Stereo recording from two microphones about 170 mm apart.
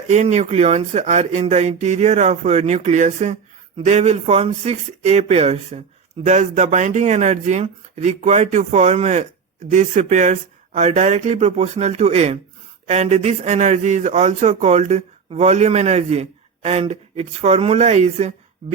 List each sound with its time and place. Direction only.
0.1 s a man's voice: 40° right (ahead or behind)